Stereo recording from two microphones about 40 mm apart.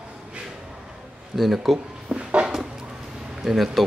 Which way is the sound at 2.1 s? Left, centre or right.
Right.